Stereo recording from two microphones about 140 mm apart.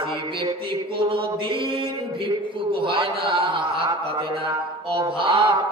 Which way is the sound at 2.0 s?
40° right (ahead or behind).